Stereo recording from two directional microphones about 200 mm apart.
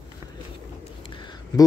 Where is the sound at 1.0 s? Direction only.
25° left (ahead or behind).